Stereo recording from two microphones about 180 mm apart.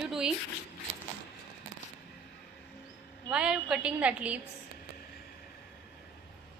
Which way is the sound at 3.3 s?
5° right (ahead or behind).